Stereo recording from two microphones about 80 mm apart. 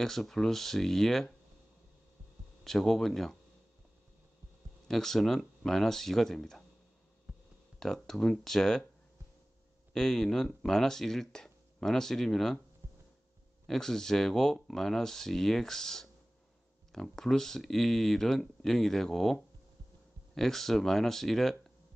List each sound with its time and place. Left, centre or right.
0.0 s speech: centre
2.6 s speech: centre
4.8 s speech: centre
7.3 s a sound: centre
7.8 s speech: centre
9.9 s speech: centre
12.8 s a sound: right
13.7 s speech: centre